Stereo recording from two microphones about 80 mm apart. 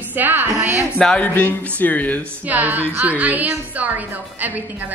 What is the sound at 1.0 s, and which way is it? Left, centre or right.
Speech, centre.